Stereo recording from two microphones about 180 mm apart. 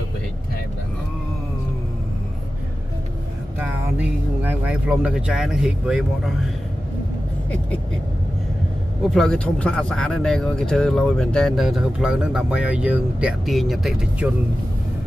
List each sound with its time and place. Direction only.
3.5 s speech: 10° right (ahead or behind)
9.1 s speech: 5° left (ahead or behind)